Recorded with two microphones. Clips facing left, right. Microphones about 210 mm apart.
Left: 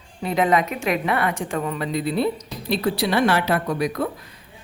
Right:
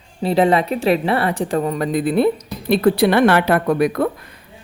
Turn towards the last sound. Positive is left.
turn(degrees=-55)  # may be behind; listen again after turning